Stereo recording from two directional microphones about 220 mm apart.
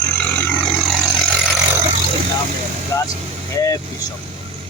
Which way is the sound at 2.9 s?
15° left (ahead or behind).